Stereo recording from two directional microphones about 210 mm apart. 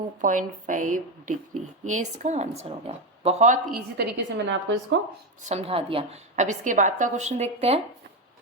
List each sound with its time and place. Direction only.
0.2 s speech: 40° right (ahead or behind); by 4.9 s 55° right (ahead or behind)
5.5 s speech: 30° right (ahead or behind)